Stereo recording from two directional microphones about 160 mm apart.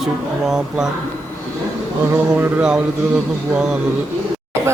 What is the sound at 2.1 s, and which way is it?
Speech, 10° right (ahead or behind).